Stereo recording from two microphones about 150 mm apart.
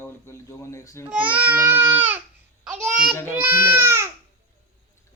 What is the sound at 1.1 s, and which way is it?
Baby cry, 10° right (ahead or behind).